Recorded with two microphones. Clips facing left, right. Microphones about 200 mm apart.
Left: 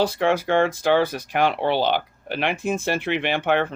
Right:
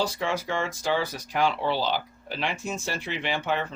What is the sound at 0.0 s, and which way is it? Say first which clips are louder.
Speech: left 7 dB; 60° left (ahead or behind).